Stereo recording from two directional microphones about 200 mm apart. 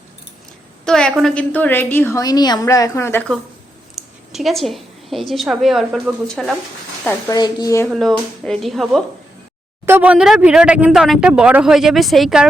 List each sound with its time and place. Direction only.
0.9 s a woman's voice: 5° left (ahead or behind)
3.9 s a woman's voice: centre (ahead or behind)
7.3 s a woman's voice: 20° left (ahead or behind)
7.9 s speech: centre (ahead or behind)